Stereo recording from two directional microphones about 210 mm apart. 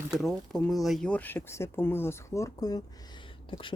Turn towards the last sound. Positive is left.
turn(degrees=25)  # may be behind; listen again after turning